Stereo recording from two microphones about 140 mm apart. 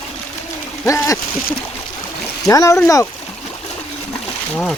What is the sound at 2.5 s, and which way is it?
Speech, 20° left (ahead or behind).